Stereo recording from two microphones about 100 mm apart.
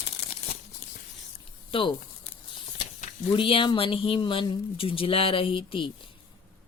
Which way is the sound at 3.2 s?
65° left (ahead or behind).